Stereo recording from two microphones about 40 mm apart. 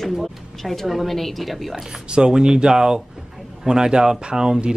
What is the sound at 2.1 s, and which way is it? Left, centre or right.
Speech, right.